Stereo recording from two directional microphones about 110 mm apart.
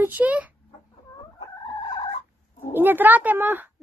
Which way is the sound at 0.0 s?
15° right (ahead or behind).